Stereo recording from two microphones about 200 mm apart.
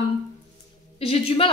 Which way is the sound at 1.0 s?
30° left (ahead or behind).